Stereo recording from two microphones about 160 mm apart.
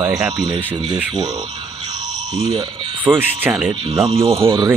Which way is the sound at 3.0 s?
10° right (ahead or behind).